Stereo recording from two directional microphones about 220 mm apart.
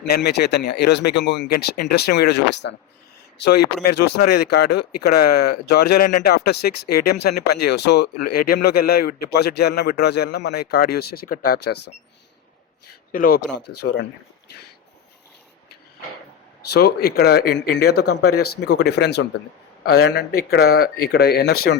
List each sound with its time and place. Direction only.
0.0 s speech: 50° left (ahead or behind)
13.1 s speech: 40° left (ahead or behind)
16.7 s speech: 45° left (ahead or behind)